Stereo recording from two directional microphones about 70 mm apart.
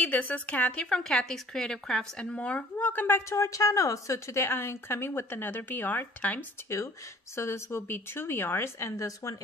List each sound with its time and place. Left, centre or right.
0.0 s a woman's voice: left
7.3 s speech: left